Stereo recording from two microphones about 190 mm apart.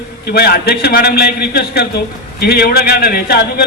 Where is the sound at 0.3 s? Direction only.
55° left (ahead or behind).